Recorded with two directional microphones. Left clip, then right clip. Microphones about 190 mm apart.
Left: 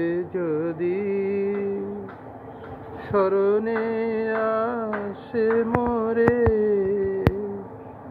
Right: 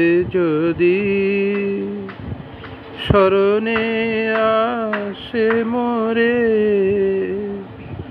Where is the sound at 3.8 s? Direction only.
35° right (ahead or behind).